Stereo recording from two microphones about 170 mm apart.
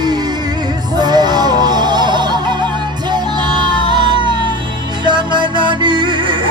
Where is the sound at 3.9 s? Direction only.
25° right (ahead or behind).